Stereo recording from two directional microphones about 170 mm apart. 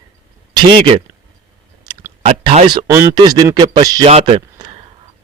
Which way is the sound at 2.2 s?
35° right (ahead or behind).